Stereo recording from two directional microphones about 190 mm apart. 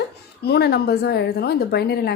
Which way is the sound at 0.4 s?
60° left (ahead or behind).